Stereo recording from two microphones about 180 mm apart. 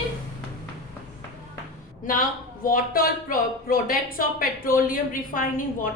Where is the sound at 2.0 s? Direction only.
50° left (ahead or behind).